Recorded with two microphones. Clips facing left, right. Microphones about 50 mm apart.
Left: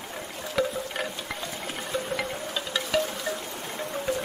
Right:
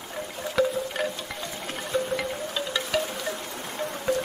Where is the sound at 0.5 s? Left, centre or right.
Centre.